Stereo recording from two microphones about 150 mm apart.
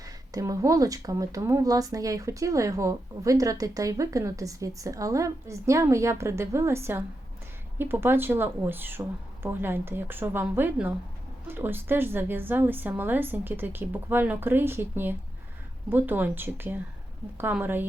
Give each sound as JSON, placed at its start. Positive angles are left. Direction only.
{"t": 0.0, "sound": "a woman's voice", "side_deg": -20}